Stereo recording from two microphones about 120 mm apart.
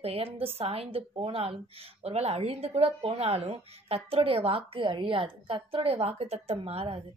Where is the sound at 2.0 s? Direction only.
60° right (ahead or behind).